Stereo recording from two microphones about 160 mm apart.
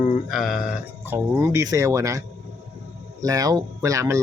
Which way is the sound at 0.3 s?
Centre (ahead or behind).